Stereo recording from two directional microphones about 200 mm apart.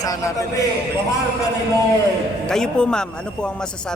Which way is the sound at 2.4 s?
5° left (ahead or behind).